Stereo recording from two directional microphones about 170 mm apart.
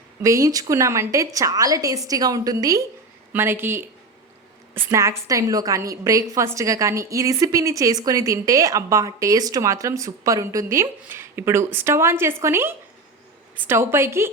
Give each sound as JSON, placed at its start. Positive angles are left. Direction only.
{"t": 0.2, "sound": "a woman's voice", "side_deg": -20}